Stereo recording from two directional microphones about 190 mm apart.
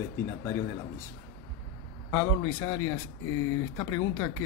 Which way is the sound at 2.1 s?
15° left (ahead or behind).